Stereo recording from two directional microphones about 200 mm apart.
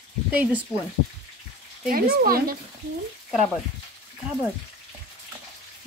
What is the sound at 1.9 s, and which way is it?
Speech, 45° right (ahead or behind).